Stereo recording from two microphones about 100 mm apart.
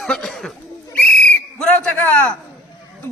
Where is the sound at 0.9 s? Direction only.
10° left (ahead or behind).